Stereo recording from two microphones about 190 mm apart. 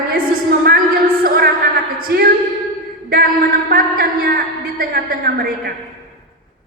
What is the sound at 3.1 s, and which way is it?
A man's voice, 50° right (ahead or behind).